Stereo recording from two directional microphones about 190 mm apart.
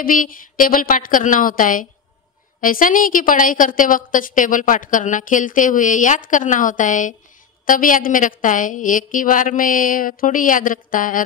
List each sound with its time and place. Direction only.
0.0 s a woman's voice: 45° left (ahead or behind)